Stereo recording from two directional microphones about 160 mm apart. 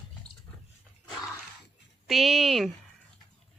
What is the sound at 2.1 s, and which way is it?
Speech, centre (ahead or behind).